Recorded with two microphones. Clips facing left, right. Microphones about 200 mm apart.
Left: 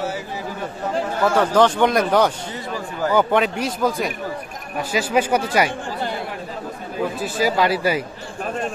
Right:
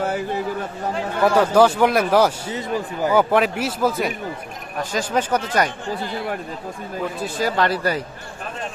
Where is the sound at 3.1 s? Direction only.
5° right (ahead or behind).